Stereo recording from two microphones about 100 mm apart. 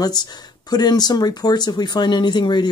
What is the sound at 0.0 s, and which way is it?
Speech, 45° left (ahead or behind).